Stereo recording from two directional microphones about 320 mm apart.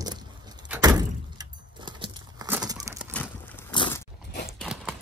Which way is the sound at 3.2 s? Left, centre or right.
Centre.